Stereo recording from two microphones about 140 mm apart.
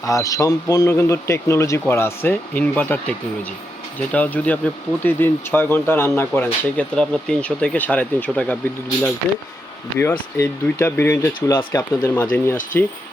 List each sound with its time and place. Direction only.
0.0 s speech: 25° left (ahead or behind)
10.0 s speech: 20° left (ahead or behind)